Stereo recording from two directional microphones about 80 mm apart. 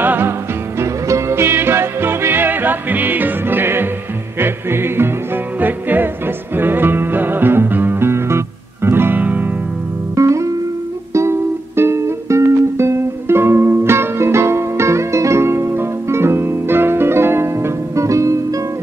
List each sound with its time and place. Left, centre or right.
0.0 s music: right
0.7 s music: right
10.1 s music: right